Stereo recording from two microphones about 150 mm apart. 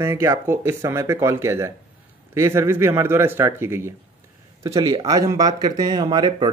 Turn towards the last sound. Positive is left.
turn(degrees=-30)  # may be behind; listen again after turning